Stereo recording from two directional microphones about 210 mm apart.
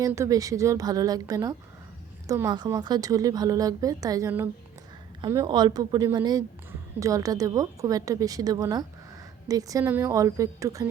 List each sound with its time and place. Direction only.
0.0 s speech: 15° right (ahead or behind)